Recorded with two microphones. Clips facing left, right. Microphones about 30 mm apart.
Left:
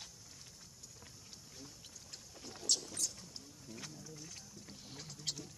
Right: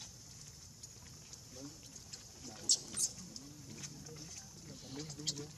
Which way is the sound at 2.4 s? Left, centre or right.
Left.